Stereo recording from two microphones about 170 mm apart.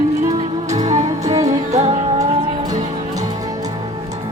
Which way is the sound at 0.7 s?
40° right (ahead or behind).